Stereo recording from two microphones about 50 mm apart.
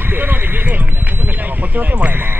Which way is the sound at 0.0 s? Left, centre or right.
Right.